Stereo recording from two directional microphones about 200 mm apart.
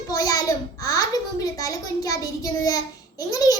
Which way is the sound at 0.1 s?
15° left (ahead or behind).